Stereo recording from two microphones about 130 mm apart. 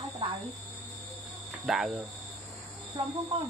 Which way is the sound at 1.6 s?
Centre (ahead or behind).